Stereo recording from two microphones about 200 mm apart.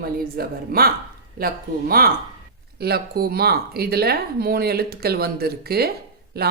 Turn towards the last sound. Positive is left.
turn(degrees=-50)  # may be behind; listen again after turning